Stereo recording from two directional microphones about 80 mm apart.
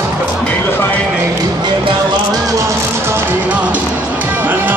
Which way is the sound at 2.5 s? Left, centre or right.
Right.